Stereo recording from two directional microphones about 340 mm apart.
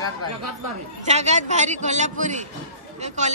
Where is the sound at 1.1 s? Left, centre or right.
Centre.